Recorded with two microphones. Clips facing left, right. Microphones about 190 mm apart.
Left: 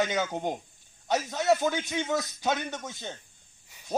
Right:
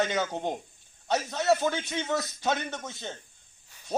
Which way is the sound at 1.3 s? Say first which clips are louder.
Even; 15° left (ahead or behind).